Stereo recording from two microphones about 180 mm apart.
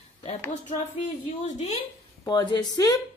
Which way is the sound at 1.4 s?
40° left (ahead or behind).